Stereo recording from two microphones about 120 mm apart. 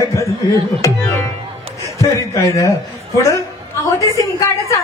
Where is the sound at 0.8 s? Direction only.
25° left (ahead or behind).